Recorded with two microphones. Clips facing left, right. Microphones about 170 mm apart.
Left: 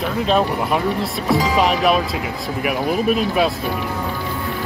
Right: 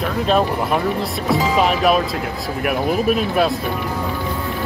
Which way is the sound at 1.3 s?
Centre (ahead or behind).